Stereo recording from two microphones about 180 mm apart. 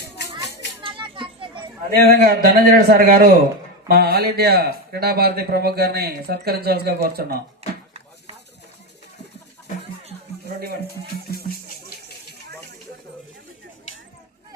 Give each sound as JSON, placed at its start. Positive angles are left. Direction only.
{"t": 0.0, "sound": "music", "side_deg": 70}
{"t": 0.8, "sound": "children playing", "side_deg": -30}
{"t": 2.0, "sound": "a man's voice", "side_deg": -55}
{"t": 3.8, "sound": "a man's voice", "side_deg": -60}